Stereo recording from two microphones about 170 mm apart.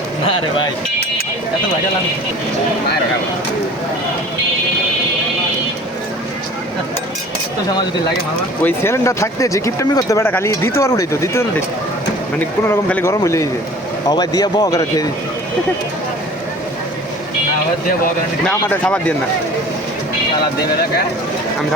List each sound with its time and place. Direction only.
0.3 s speech: 30° left (ahead or behind)
8.6 s speech: 15° left (ahead or behind)
12.6 s speech: 15° left (ahead or behind)
18.7 s speech: 5° left (ahead or behind)